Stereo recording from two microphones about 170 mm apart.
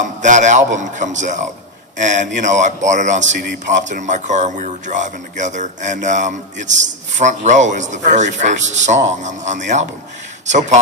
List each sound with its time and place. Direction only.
0.0 s a man's voice: 45° right (ahead or behind)